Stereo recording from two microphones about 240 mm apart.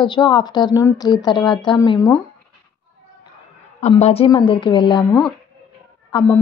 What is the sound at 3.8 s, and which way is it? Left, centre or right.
A woman's voice, left.